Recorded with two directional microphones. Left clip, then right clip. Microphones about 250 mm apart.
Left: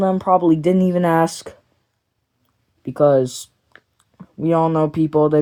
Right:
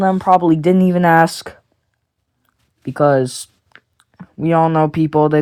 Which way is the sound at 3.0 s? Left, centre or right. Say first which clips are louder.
Right 1 dB; centre.